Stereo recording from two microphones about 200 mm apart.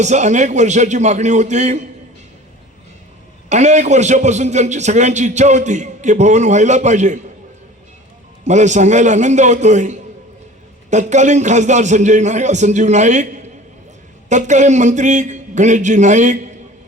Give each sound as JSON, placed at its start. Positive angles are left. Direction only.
{"t": 0.0, "sound": "a man's voice", "side_deg": -35}
{"t": 3.5, "sound": "a man's voice", "side_deg": -35}
{"t": 8.4, "sound": "a man's voice", "side_deg": -35}
{"t": 14.3, "sound": "a man's voice", "side_deg": -35}